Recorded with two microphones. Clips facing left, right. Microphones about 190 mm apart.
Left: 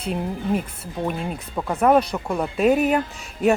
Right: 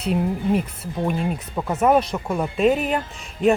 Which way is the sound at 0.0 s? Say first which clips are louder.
Right 4 dB; 5° right (ahead or behind).